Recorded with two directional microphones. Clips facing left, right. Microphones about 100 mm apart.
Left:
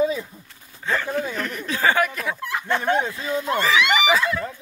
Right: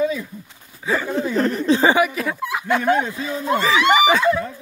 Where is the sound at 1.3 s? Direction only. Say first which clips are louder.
Right 10 dB; 30° right (ahead or behind).